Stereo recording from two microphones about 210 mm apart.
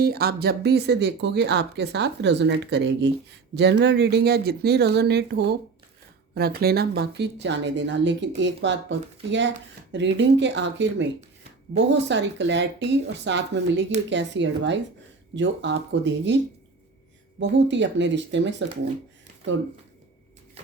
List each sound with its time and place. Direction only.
0.0 s speech: 45° right (ahead or behind)
17.4 s speech: 60° right (ahead or behind)